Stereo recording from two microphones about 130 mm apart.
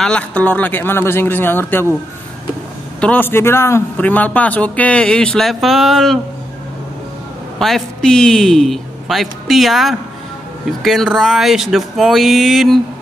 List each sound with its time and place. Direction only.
0.0 s a man's voice: 10° left (ahead or behind)
3.0 s a man's voice: 15° left (ahead or behind)
7.5 s a man's voice: centre (ahead or behind)